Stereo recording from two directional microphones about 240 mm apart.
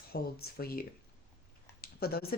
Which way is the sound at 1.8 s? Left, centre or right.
Left.